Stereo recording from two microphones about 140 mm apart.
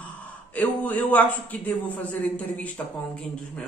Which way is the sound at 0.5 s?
10° left (ahead or behind).